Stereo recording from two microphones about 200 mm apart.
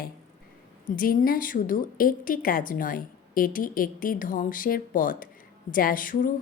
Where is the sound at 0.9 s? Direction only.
45° left (ahead or behind).